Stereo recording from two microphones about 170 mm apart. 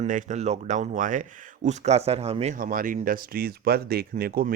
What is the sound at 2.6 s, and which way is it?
Speech, 55° right (ahead or behind).